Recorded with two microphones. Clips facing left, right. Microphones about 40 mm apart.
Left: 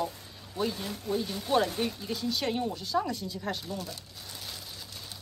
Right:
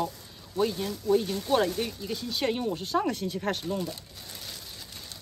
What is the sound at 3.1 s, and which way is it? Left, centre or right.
Speech, right.